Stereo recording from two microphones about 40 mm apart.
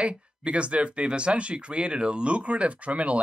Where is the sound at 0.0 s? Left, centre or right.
Right.